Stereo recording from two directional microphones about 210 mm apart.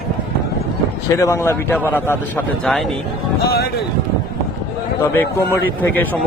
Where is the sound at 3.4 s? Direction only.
50° left (ahead or behind).